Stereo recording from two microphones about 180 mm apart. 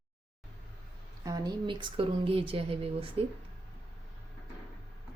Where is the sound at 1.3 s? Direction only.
20° right (ahead or behind).